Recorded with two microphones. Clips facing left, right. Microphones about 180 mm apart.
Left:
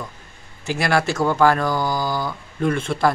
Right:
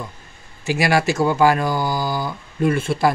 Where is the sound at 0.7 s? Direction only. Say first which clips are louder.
Right 2 dB; 10° right (ahead or behind).